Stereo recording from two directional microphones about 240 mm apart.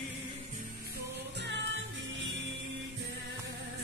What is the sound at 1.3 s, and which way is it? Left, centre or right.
Music, right.